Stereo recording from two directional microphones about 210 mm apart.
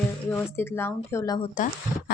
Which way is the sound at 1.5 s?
40° left (ahead or behind).